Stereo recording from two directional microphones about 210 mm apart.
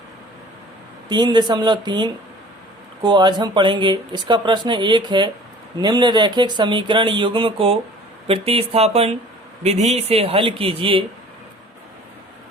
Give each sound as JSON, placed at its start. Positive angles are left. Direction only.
{"t": 1.0, "sound": "speech", "side_deg": -20}